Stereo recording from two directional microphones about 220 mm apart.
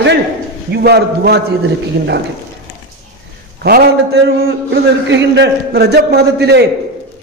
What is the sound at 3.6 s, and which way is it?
A man's voice, 45° right (ahead or behind).